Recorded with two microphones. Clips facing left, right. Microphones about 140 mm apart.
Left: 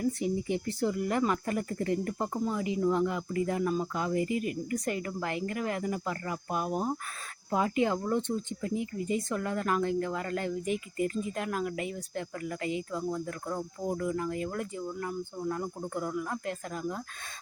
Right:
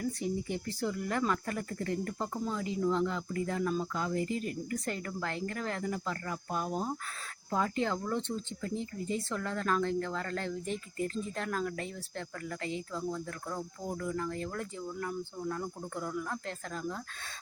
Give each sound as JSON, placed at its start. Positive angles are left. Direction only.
{"t": 0.0, "sound": "speech", "side_deg": 20}